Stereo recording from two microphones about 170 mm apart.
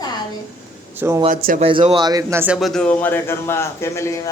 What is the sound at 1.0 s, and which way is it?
Speech, 15° right (ahead or behind).